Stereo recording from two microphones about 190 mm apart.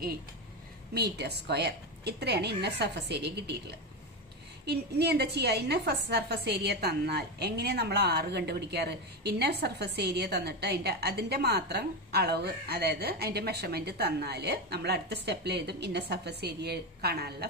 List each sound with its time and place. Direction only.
0.9 s a woman's voice: 60° right (ahead or behind)
4.6 s a woman's voice: 60° right (ahead or behind)